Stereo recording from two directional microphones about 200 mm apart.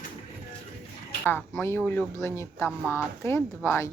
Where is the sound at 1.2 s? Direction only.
10° left (ahead or behind).